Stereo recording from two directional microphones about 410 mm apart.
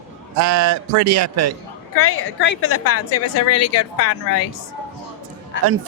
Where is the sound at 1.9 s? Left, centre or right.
Left.